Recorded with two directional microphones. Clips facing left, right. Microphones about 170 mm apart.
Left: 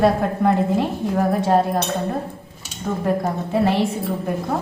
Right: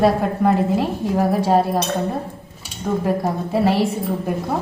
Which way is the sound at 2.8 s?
5° right (ahead or behind).